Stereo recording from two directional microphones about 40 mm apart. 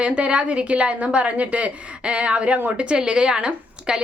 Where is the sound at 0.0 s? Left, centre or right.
Right.